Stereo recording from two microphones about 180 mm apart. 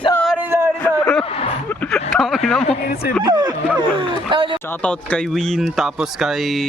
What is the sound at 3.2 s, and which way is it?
Speech, 25° right (ahead or behind).